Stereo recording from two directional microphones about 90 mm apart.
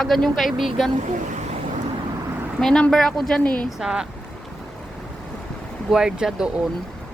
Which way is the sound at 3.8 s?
5° right (ahead or behind).